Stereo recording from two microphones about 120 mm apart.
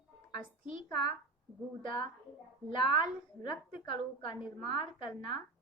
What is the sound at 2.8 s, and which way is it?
A woman's voice, 45° left (ahead or behind).